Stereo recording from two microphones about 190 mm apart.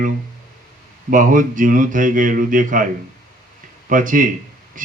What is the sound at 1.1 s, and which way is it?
Speech, 45° right (ahead or behind).